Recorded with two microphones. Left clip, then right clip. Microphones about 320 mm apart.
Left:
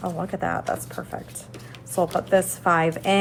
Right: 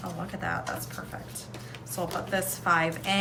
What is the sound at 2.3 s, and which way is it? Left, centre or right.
Speech, centre.